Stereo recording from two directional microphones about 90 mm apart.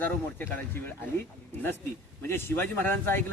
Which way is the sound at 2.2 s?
25° left (ahead or behind).